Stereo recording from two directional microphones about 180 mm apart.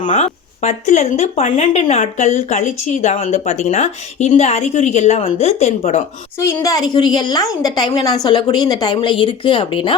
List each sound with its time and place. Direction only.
0.1 s speech: 35° left (ahead or behind)
6.4 s a woman's voice: 15° left (ahead or behind)